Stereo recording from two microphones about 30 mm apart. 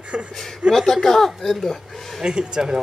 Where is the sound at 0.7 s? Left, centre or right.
Centre.